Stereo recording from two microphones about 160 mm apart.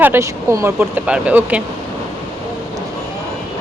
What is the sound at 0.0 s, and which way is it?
Speech, 15° right (ahead or behind).